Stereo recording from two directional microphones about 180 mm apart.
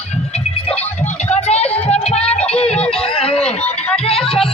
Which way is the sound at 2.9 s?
30° left (ahead or behind).